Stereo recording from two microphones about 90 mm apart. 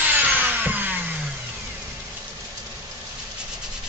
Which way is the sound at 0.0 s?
20° right (ahead or behind).